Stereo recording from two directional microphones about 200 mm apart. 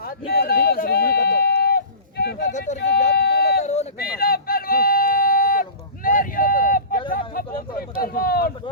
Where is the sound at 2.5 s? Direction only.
35° left (ahead or behind).